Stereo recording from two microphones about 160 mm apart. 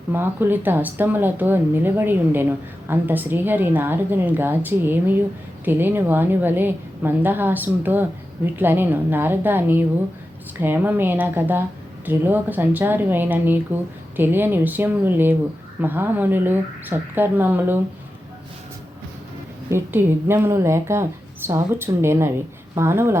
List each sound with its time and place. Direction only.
0.1 s speech: 15° right (ahead or behind)
19.7 s speech: 15° right (ahead or behind)